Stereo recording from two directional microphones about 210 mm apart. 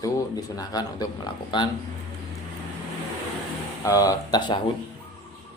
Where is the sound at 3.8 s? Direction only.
15° left (ahead or behind).